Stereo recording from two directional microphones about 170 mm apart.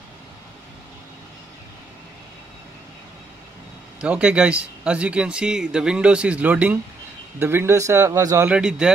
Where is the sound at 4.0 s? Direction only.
5° right (ahead or behind).